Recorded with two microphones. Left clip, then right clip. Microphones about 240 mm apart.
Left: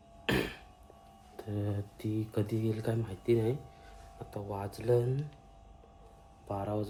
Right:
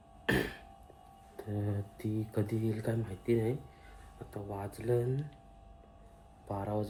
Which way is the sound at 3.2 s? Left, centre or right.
Left.